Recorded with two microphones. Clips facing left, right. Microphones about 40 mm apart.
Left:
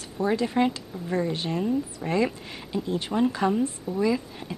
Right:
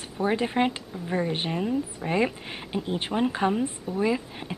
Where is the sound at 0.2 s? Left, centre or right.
Right.